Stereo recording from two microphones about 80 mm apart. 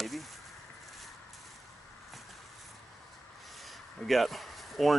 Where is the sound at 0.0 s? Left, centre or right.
Centre.